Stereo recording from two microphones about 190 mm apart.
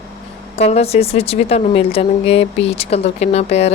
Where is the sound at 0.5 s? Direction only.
35° left (ahead or behind).